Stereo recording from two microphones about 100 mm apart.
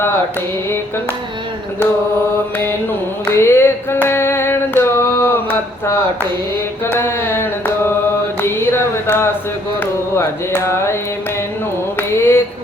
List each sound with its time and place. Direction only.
3.2 s a sound: 25° left (ahead or behind)
9.8 s carnatic music: 25° left (ahead or behind)
11.9 s mantra: 25° left (ahead or behind)